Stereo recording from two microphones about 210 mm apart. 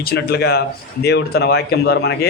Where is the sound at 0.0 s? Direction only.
50° left (ahead or behind).